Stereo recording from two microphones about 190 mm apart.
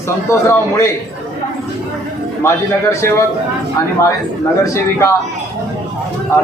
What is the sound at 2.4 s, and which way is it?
Speech, 15° left (ahead or behind).